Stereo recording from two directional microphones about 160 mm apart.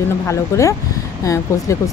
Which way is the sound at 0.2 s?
20° left (ahead or behind).